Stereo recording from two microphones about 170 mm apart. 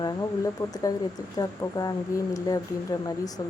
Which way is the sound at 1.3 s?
20° left (ahead or behind).